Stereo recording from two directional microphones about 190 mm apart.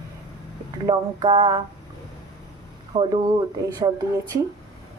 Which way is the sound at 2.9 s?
25° right (ahead or behind).